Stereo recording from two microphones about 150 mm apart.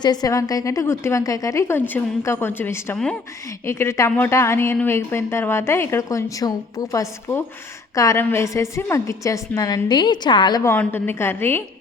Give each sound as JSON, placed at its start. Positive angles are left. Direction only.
{"t": 0.0, "sound": "a woman's voice", "side_deg": 25}
{"t": 10.6, "sound": "a woman's voice", "side_deg": 15}